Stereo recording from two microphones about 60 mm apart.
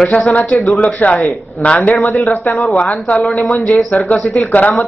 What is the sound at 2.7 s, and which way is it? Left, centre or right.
Speech, left.